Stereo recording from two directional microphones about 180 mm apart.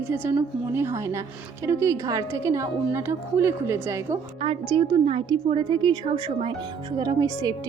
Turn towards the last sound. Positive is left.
turn(degrees=-20)  # may be behind; listen again after turning